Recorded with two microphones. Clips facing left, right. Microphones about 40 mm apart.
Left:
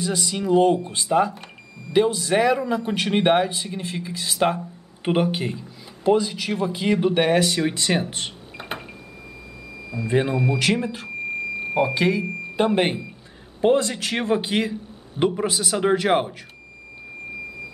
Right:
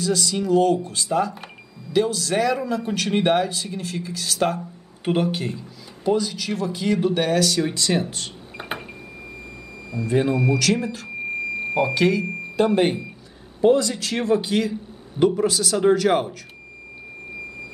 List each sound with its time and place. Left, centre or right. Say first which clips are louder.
0.0 s a man's voice: right 2 dB; left
8.5 s a sound: right 2 dB; centre
10.2 s a man's voice: right 1 dB; centre